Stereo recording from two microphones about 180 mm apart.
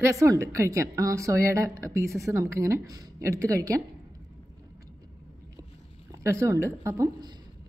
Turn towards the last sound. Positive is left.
turn(degrees=-20)  # may be behind; listen again after turning